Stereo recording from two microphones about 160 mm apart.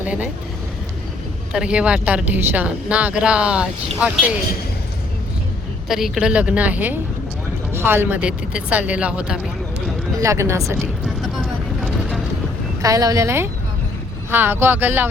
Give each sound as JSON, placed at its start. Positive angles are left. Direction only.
{"t": 1.5, "sound": "speech", "side_deg": -5}
{"t": 5.9, "sound": "speech", "side_deg": -5}
{"t": 10.2, "sound": "speech", "side_deg": -20}
{"t": 11.0, "sound": "vehicle", "side_deg": 0}
{"t": 12.8, "sound": "speech", "side_deg": -20}